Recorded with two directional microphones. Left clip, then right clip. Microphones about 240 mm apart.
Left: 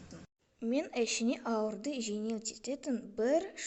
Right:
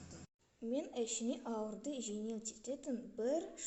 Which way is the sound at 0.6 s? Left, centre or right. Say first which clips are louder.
Left 7 dB; left.